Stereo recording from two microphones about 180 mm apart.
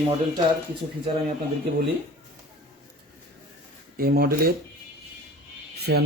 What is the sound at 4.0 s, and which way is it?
Speech, 55° right (ahead or behind).